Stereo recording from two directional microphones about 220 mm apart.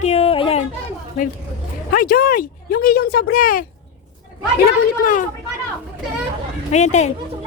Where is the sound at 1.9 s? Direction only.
40° left (ahead or behind).